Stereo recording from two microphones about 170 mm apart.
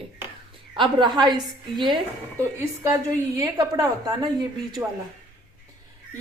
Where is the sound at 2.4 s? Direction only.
15° right (ahead or behind).